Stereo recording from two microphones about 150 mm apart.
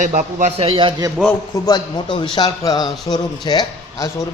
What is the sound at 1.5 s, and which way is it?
A man's voice, 25° left (ahead or behind).